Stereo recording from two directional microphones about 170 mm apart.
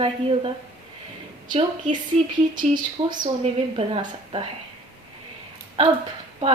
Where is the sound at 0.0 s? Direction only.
30° right (ahead or behind).